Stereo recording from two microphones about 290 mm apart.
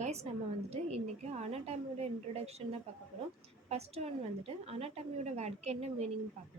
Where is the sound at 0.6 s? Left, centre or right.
Right.